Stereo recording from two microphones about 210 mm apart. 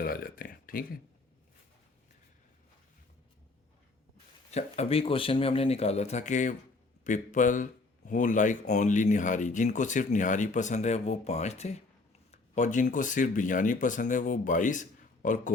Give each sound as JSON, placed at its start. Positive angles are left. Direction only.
{"t": 0.0, "sound": "speech", "side_deg": 45}
{"t": 4.5, "sound": "speech", "side_deg": 30}